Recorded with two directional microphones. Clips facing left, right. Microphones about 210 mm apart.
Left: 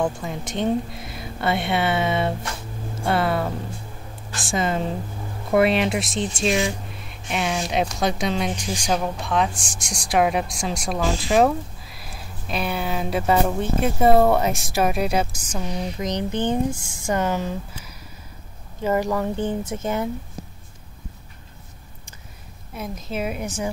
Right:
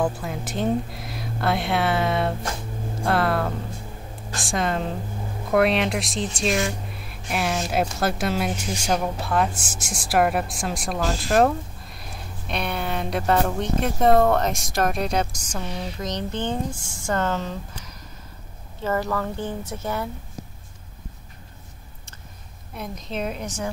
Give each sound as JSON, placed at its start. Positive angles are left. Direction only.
{"t": 0.0, "sound": "a woman's voice", "side_deg": 0}
{"t": 22.8, "sound": "speech", "side_deg": 5}